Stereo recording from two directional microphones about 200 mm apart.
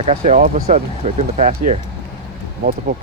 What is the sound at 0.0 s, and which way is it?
Speech, 30° right (ahead or behind).